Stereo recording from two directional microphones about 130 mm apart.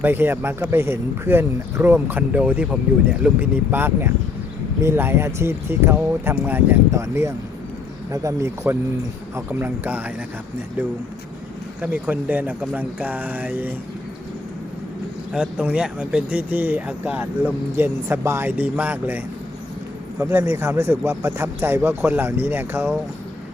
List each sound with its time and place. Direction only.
0.0 s speech: 15° right (ahead or behind)
11.8 s speech: 15° right (ahead or behind)
15.3 s speech: 10° right (ahead or behind)